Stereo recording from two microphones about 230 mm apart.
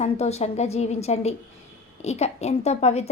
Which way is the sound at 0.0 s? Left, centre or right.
Left.